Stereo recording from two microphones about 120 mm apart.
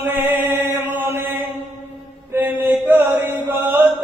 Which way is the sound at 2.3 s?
15° right (ahead or behind).